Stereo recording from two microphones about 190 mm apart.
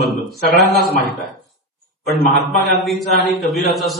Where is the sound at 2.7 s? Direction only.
Centre (ahead or behind).